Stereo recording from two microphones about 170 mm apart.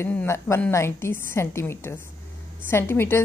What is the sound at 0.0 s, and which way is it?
A woman's voice, 10° left (ahead or behind).